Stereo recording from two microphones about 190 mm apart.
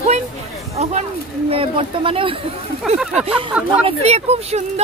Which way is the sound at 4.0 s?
35° right (ahead or behind).